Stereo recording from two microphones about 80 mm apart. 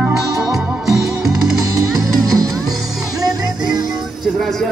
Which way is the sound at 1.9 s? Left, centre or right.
Right.